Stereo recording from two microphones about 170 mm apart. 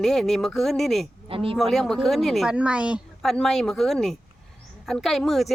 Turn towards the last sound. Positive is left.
turn(degrees=0)  # may be behind; listen again after turning